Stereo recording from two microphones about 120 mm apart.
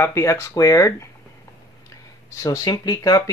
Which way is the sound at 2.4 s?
30° left (ahead or behind).